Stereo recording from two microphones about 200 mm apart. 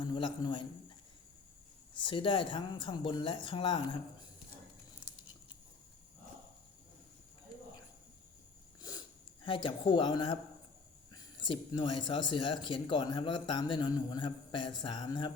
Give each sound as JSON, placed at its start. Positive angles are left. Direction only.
{"t": 0.0, "sound": "a man's voice", "side_deg": 25}
{"t": 2.0, "sound": "speech", "side_deg": 25}
{"t": 9.4, "sound": "speech", "side_deg": 25}